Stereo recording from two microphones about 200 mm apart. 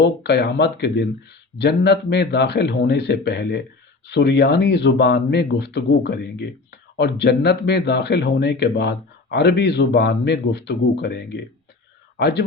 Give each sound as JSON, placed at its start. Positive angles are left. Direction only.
{"t": 0.0, "sound": "speech", "side_deg": 55}